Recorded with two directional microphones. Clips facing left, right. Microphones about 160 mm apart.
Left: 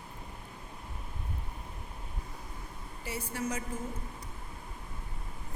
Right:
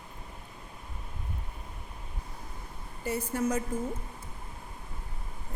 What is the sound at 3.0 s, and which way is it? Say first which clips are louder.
Speech: right 6 dB; 50° right (ahead or behind).